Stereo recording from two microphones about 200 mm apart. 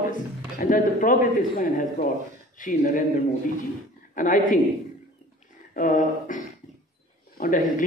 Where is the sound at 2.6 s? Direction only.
40° left (ahead or behind).